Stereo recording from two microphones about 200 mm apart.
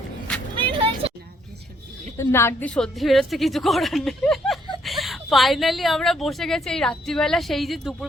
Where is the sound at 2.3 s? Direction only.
10° left (ahead or behind).